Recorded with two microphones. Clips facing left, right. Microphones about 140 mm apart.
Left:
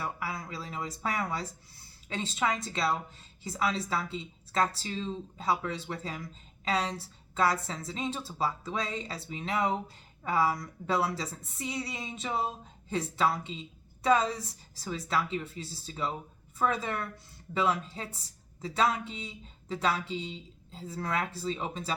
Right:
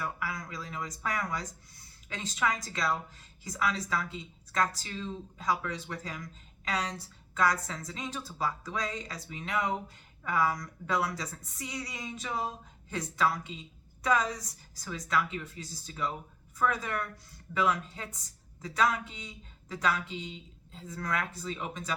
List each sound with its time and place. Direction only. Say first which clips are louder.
0.0 s a woman's voice: left 1 dB; 30° left (ahead or behind)